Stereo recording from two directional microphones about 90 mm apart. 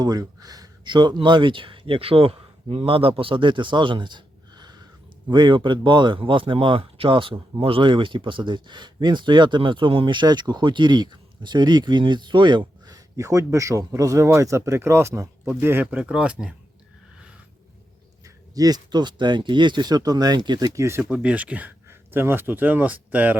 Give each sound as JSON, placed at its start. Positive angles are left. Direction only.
{"t": 0.0, "sound": "speech", "side_deg": -45}
{"t": 15.6, "sound": "speech", "side_deg": -20}
{"t": 18.5, "sound": "speech", "side_deg": -45}
{"t": 21.0, "sound": "speech", "side_deg": -15}
{"t": 21.8, "sound": "speech", "side_deg": -25}